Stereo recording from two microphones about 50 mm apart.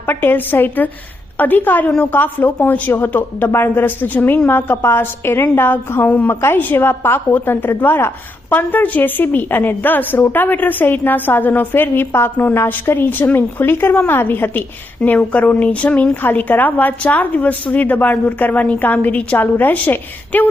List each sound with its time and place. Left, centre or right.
0.0 s a woman's voice: left
15.0 s a woman's voice: left